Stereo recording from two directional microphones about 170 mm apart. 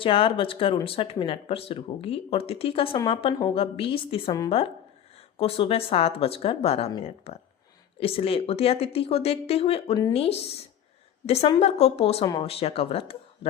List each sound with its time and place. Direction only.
0.0 s speech: 30° left (ahead or behind)
5.4 s speech: 35° left (ahead or behind)
12.2 s speech: 25° left (ahead or behind)
12.5 s speech: 35° left (ahead or behind)